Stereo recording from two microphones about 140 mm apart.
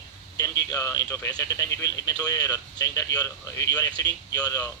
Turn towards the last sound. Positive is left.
turn(degrees=25)  # may be behind; listen again after turning